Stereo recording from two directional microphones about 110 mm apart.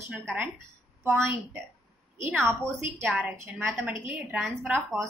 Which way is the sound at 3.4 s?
20° right (ahead or behind).